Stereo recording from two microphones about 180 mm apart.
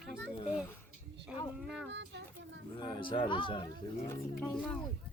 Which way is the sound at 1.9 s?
80° right.